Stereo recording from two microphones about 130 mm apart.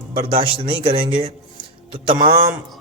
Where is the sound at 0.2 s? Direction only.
40° right (ahead or behind).